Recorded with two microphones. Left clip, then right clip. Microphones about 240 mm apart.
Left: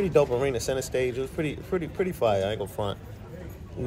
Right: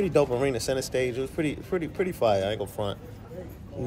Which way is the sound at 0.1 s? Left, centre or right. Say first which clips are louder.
Left 3 dB; centre.